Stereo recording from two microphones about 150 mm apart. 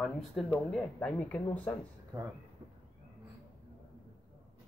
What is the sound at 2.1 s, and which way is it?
Speech, 20° right (ahead or behind).